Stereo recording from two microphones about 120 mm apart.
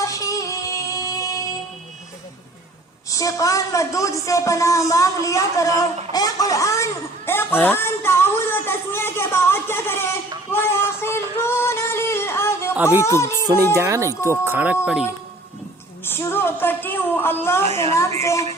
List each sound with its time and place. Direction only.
0.0 s music: 30° left (ahead or behind)
3.1 s speech: 30° left (ahead or behind)
6.1 s a sound: 30° left (ahead or behind)
12.7 s speech: 10° right (ahead or behind)
13.0 s speech: 25° left (ahead or behind)
13.7 s speech: 25° right (ahead or behind); by 15.1 s 5° right (ahead or behind)
16.0 s a sound: 20° left (ahead or behind)